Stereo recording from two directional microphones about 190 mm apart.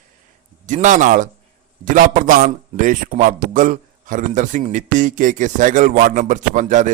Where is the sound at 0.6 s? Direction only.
40° right (ahead or behind).